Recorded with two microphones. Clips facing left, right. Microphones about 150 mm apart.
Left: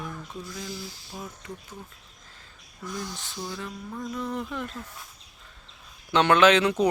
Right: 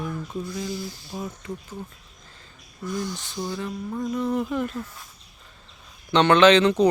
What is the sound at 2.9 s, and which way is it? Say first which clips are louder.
Speech: right 6 dB; centre (ahead or behind).